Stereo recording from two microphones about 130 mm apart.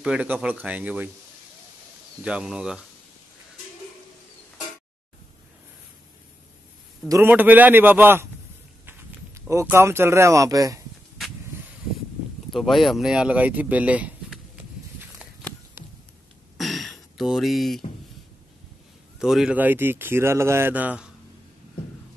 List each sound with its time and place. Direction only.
0.0 s speech: 10° right (ahead or behind)
2.2 s speech: 5° right (ahead or behind)
7.1 s speech: 15° right (ahead or behind)
12.4 s speech: centre (ahead or behind)
16.5 s a sound: centre (ahead or behind)
19.1 s speech: 5° right (ahead or behind)